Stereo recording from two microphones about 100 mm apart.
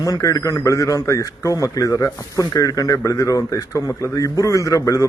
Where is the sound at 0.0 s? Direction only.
35° left (ahead or behind).